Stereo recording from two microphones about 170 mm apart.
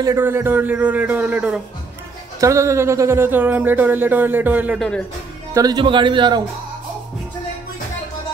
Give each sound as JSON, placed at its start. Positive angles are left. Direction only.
{"t": 0.0, "sound": "speech", "side_deg": -15}
{"t": 4.7, "sound": "speech", "side_deg": 5}
{"t": 5.5, "sound": "speech", "side_deg": -20}